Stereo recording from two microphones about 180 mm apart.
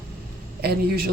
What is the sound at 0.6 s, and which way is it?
Speech, 60° right (ahead or behind).